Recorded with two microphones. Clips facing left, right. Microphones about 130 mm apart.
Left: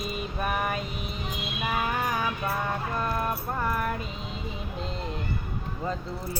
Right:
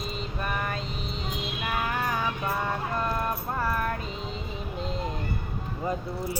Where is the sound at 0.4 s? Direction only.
10° left (ahead or behind).